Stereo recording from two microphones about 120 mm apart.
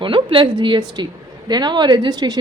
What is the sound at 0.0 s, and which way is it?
A woman's voice, 45° right (ahead or behind).